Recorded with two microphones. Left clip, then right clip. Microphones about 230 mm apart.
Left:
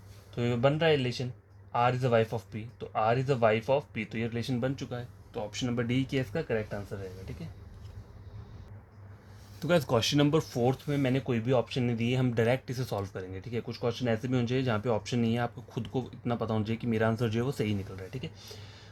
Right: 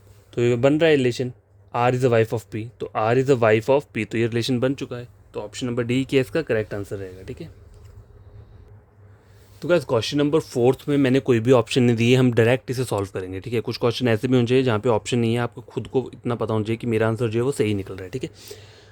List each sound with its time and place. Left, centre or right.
0.3 s speech: right
9.6 s speech: right
10.4 s speech: right